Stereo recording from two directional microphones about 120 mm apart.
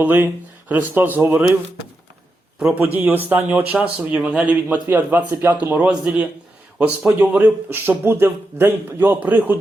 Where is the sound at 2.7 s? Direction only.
15° right (ahead or behind).